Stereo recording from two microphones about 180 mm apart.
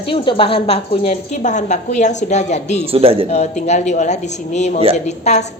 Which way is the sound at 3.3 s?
40° left (ahead or behind).